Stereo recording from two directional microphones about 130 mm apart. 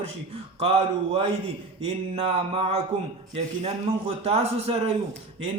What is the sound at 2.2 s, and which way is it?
Speech, 55° right (ahead or behind).